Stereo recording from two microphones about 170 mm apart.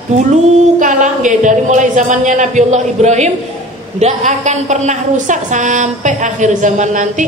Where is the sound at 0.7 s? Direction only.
45° right (ahead or behind).